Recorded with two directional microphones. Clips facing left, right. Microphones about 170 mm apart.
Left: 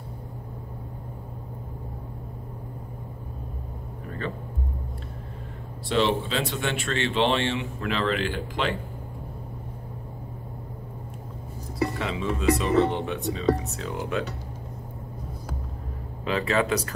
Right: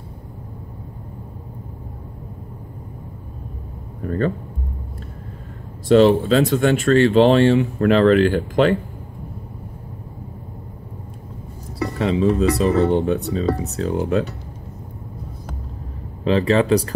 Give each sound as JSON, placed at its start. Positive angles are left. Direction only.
{"t": 4.0, "sound": "speech", "side_deg": -45}
{"t": 5.9, "sound": "speech", "side_deg": -45}
{"t": 12.0, "sound": "speech", "side_deg": -35}
{"t": 16.3, "sound": "speech", "side_deg": -30}